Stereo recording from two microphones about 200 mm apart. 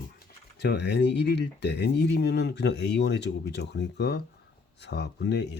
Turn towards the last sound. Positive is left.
turn(degrees=60)  # may be behind; listen again after turning